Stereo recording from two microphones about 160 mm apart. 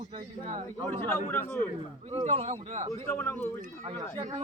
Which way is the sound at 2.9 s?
15° left (ahead or behind).